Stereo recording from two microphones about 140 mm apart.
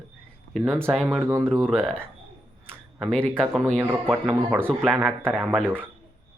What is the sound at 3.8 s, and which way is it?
Speech, 10° right (ahead or behind).